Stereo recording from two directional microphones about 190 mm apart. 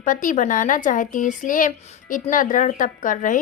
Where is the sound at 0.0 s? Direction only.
45° left (ahead or behind).